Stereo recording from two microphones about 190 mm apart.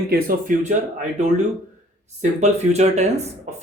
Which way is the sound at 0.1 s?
45° right (ahead or behind).